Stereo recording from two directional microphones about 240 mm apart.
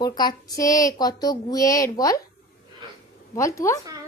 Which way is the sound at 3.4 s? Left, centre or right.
Centre.